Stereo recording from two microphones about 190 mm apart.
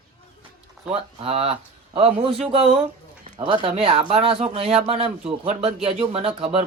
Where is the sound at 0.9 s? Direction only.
30° right (ahead or behind).